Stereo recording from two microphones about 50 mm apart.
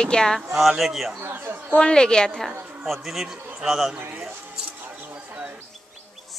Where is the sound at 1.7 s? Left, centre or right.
Centre.